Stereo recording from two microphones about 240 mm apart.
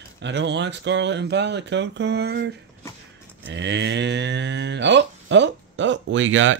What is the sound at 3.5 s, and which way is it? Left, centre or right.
Cattle, right.